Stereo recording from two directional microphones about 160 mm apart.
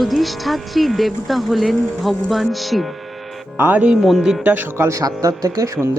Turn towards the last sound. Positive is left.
turn(degrees=-20)  # may be behind; listen again after turning